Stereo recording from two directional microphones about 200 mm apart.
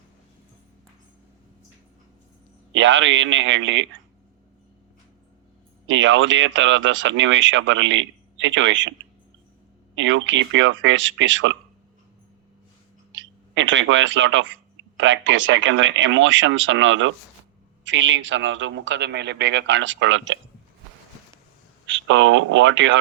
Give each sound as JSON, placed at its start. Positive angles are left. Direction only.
{"t": 2.7, "sound": "speech", "side_deg": -70}
{"t": 5.9, "sound": "speech", "side_deg": -70}
{"t": 9.9, "sound": "speech", "side_deg": -70}
{"t": 13.1, "sound": "speech", "side_deg": -70}
{"t": 21.8, "sound": "speech", "side_deg": -65}